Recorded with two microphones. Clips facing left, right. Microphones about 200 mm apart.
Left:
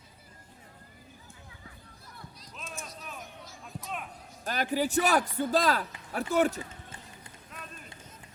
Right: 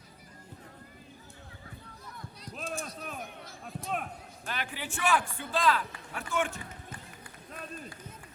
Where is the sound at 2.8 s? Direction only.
55° right (ahead or behind).